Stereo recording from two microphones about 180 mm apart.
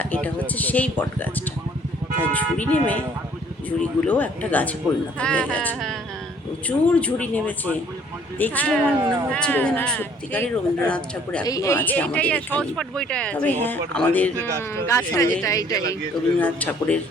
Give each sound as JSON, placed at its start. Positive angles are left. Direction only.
{"t": 0.0, "sound": "speech", "side_deg": 10}
{"t": 11.4, "sound": "speech", "side_deg": 20}
{"t": 16.4, "sound": "speech", "side_deg": 10}